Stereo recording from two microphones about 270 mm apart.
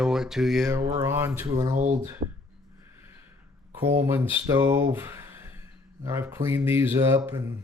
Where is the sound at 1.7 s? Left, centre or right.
Right.